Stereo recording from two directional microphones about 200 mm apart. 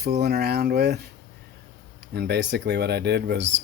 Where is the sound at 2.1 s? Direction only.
55° right (ahead or behind).